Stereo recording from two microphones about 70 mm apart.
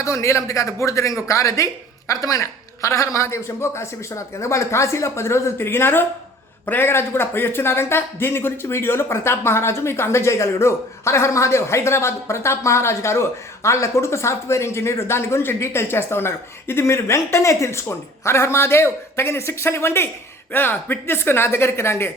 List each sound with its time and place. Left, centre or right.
0.0 s a woman's voice: left